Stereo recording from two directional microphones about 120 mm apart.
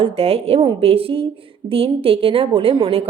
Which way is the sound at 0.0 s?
55° right (ahead or behind).